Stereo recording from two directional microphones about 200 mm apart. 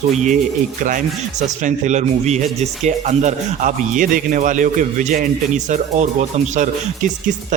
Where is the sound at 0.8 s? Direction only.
40° right (ahead or behind).